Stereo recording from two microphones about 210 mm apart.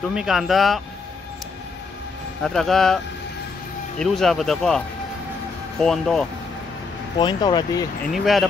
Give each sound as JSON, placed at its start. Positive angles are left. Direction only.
{"t": 0.0, "sound": "speech", "side_deg": 0}
{"t": 2.4, "sound": "speech", "side_deg": 0}
{"t": 4.0, "sound": "speech", "side_deg": 0}
{"t": 7.2, "sound": "speech", "side_deg": 20}
{"t": 8.1, "sound": "speech", "side_deg": 0}